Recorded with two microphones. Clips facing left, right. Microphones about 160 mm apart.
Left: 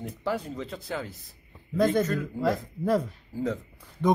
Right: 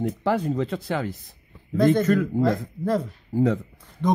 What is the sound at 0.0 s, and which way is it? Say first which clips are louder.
Speech: right 7 dB; 75° right (ahead or behind).